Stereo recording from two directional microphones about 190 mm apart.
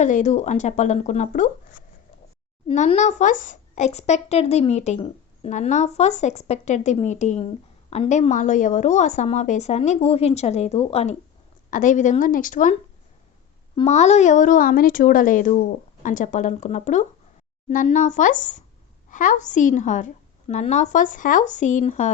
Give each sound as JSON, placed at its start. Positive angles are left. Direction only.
{"t": 0.0, "sound": "speech", "side_deg": 40}
{"t": 2.6, "sound": "a woman's voice", "side_deg": 35}
{"t": 13.7, "sound": "speech", "side_deg": 35}